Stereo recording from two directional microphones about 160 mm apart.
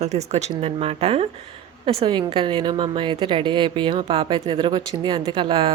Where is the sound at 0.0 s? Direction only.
45° right (ahead or behind).